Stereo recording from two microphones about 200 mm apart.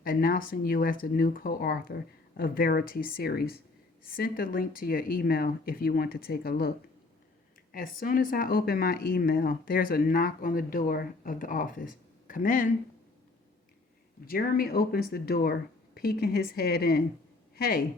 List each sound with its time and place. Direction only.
0.0 s speech: 45° left (ahead or behind)
14.3 s speech: 45° left (ahead or behind)